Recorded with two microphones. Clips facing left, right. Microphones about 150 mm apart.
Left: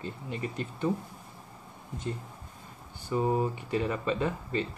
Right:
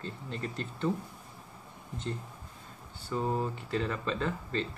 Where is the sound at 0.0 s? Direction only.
10° left (ahead or behind).